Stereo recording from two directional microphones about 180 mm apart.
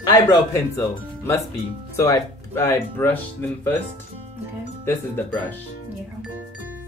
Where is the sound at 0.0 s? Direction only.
20° left (ahead or behind).